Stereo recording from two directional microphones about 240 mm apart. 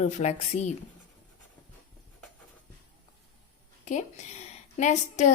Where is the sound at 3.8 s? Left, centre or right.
Left.